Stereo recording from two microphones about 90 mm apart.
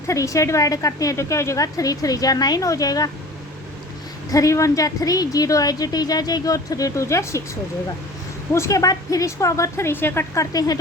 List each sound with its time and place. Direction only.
0.1 s a woman's voice: 35° left (ahead or behind)
4.3 s a woman's voice: 40° left (ahead or behind)
8.5 s a woman's voice: 35° left (ahead or behind)
10.3 s speech: 40° left (ahead or behind)